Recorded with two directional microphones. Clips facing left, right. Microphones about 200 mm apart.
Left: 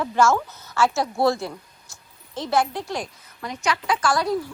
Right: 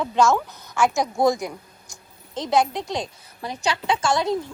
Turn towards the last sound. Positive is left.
turn(degrees=-25)  # may be behind; listen again after turning